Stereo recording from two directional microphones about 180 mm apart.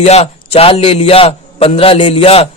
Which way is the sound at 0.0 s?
35° left (ahead or behind).